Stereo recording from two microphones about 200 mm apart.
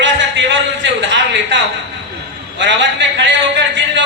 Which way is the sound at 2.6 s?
65° right (ahead or behind).